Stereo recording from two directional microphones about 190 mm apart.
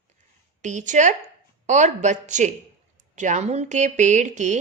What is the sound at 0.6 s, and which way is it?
Speech, 40° right (ahead or behind).